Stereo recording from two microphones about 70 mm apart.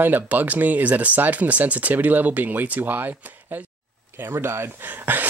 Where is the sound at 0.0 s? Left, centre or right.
Right.